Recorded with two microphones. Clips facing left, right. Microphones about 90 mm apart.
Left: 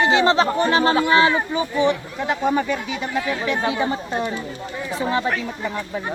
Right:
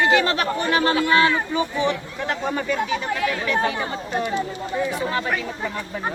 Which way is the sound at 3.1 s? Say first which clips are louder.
Even; 20° left (ahead or behind).